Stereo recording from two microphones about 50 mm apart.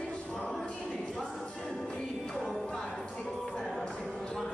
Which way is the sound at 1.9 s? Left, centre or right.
Centre.